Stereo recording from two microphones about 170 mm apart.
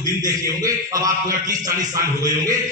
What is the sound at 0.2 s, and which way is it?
A man's voice, 20° right (ahead or behind).